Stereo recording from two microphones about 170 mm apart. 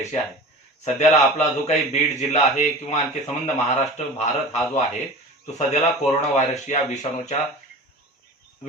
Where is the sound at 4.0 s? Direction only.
45° left (ahead or behind).